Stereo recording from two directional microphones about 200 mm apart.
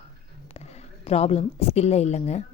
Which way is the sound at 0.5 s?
35° left (ahead or behind).